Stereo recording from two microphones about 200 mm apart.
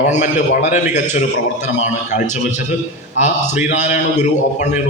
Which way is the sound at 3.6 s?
35° left (ahead or behind).